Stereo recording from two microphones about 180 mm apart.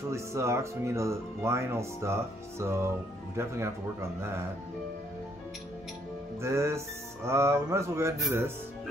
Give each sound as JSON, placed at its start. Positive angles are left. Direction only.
{"t": 0.1, "sound": "speech", "side_deg": -15}
{"t": 6.4, "sound": "speech", "side_deg": -15}